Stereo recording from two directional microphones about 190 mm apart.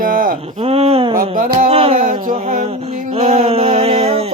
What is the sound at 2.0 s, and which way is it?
Music, 45° right (ahead or behind).